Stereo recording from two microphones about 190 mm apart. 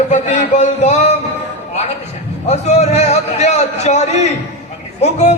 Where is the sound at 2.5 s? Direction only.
35° left (ahead or behind).